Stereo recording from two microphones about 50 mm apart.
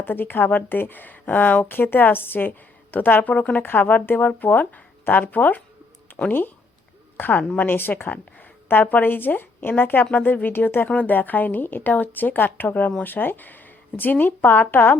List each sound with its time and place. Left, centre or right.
0.0 s speech: left
3.6 s speech: left
7.2 s speech: left
8.1 s a woman's voice: left
10.8 s speech: left